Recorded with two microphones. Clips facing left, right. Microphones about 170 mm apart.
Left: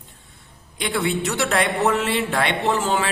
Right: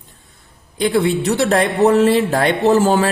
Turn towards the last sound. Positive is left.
turn(degrees=-40)  # may be behind; listen again after turning